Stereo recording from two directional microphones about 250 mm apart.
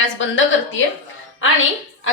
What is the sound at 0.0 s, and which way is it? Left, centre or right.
Speech, left.